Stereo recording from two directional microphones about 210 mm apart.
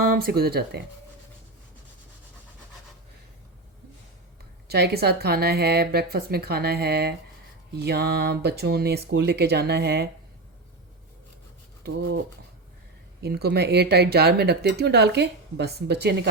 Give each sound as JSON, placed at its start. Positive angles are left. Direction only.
{"t": 0.0, "sound": "speech", "side_deg": -45}
{"t": 4.7, "sound": "speech", "side_deg": -50}
{"t": 13.2, "sound": "speech", "side_deg": -50}